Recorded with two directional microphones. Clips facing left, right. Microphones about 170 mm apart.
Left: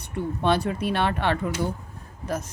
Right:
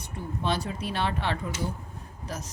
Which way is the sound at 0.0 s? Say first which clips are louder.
Left 6 dB; 65° left (ahead or behind).